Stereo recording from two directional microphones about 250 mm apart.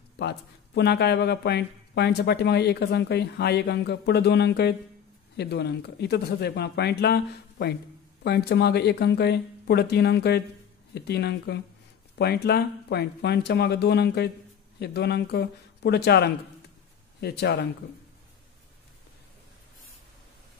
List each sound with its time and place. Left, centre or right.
0.2 s speech: left